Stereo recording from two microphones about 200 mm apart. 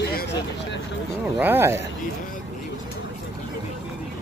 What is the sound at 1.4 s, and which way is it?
Speech, 10° right (ahead or behind).